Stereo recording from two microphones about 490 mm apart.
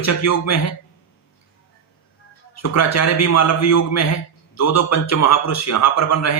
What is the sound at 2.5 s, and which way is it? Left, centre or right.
Speech, left.